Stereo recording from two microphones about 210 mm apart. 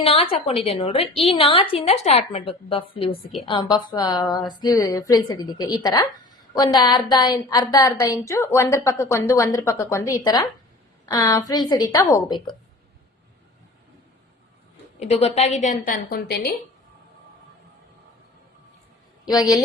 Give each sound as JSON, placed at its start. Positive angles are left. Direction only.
{"t": 0.0, "sound": "a woman's voice", "side_deg": 25}
{"t": 14.9, "sound": "a woman's voice", "side_deg": 30}
{"t": 19.2, "sound": "a woman's voice", "side_deg": 20}